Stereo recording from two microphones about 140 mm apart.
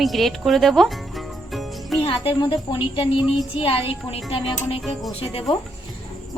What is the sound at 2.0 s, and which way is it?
Speech, 40° left (ahead or behind).